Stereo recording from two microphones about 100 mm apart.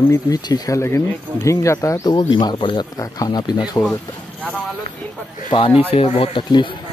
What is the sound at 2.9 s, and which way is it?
Speech, 40° left (ahead or behind).